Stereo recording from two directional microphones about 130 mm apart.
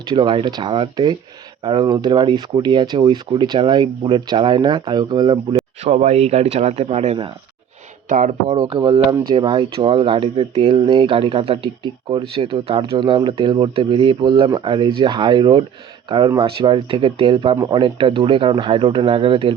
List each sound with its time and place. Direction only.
0.1 s speech: 40° right (ahead or behind)
5.8 s a man's voice: 55° right (ahead or behind)
8.1 s speech: 75° right (ahead or behind)
8.5 s speech: 45° right (ahead or behind)